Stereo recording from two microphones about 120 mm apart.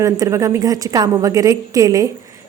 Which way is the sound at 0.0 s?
25° right (ahead or behind).